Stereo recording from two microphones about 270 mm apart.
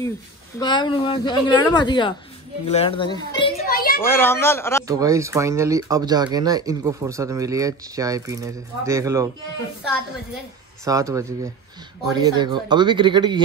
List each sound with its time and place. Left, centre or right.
0.6 s a woman's voice: centre
3.6 s a sound: left
4.0 s a woman's voice: centre
4.8 s speech: centre
10.9 s speech: centre